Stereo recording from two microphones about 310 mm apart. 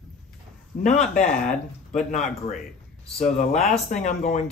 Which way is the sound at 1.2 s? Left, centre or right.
Left.